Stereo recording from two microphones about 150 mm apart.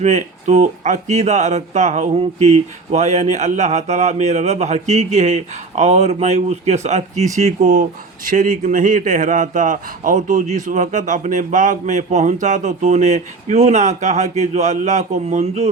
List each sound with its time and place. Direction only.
0.0 s speech: 50° right (ahead or behind)